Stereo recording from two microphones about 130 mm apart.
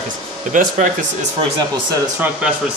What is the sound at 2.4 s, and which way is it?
Speech, 10° right (ahead or behind).